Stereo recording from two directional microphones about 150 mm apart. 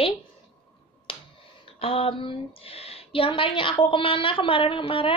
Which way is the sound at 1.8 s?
35° left (ahead or behind).